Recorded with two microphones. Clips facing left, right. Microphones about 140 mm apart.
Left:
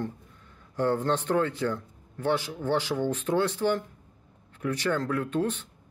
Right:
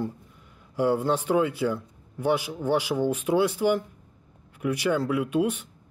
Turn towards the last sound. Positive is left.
turn(degrees=-10)  # may be behind; listen again after turning